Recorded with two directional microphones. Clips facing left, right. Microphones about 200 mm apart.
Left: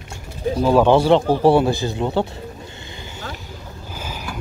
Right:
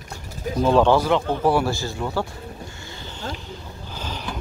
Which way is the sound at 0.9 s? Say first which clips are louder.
Left 5 dB; 30° left (ahead or behind).